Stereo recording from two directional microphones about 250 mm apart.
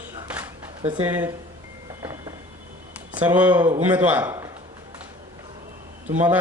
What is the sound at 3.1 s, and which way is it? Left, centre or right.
Speech, centre.